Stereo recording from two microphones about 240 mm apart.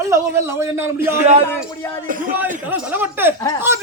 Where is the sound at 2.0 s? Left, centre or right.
Right.